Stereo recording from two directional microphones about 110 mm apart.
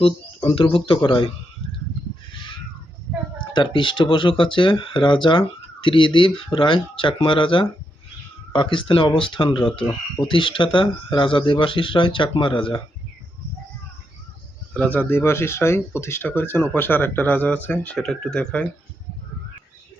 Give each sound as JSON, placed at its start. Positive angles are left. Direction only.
{"t": 0.0, "sound": "speech", "side_deg": 55}
{"t": 3.5, "sound": "speech", "side_deg": 45}
{"t": 14.7, "sound": "speech", "side_deg": 15}
{"t": 17.9, "sound": "speech", "side_deg": 5}